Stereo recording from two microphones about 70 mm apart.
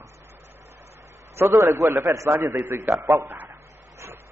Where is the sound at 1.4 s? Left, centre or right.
Right.